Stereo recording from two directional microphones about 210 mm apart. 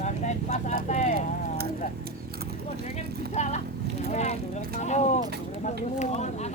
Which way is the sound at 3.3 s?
35° left (ahead or behind).